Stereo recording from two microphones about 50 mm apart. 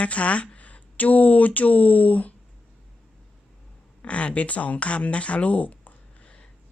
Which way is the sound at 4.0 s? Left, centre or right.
Left.